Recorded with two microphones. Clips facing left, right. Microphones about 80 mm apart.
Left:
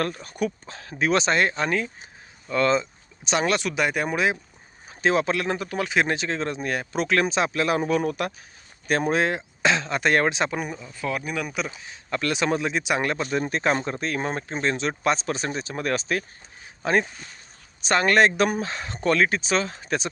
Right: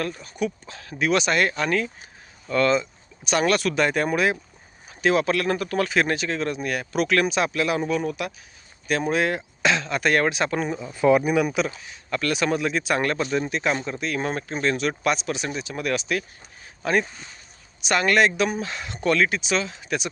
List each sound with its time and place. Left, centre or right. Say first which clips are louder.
0.0 s speech: left 1 dB; left
0.7 s speech: even; left
7.9 s speech: left 2 dB; left
10.8 s speech: right 11 dB; right
11.8 s speech: even; left
13.4 s speech: left 1 dB; left
14.2 s speech: right 1 dB; left
18.6 s speech: even; left